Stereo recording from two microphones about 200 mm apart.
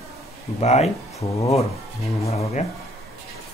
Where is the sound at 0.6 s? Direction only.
35° left (ahead or behind).